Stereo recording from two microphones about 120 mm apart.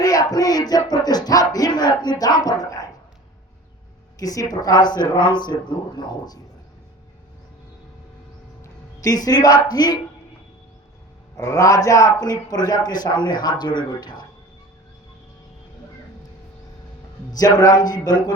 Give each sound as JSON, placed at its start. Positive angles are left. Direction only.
{"t": 0.0, "sound": "a sound", "side_deg": 30}
{"t": 4.2, "sound": "speech", "side_deg": 30}
{"t": 8.6, "sound": "speech", "side_deg": 30}
{"t": 11.3, "sound": "speech", "side_deg": 25}
{"t": 17.3, "sound": "speech", "side_deg": 30}